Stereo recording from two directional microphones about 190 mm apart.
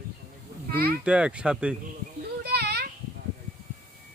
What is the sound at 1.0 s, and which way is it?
Speech, 5° right (ahead or behind).